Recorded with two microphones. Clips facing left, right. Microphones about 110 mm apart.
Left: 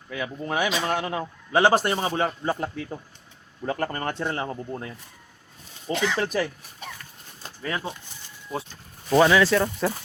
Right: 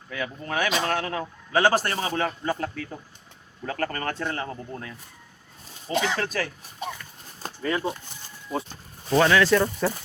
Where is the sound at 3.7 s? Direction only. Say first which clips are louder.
Left 1 dB; 20° left (ahead or behind).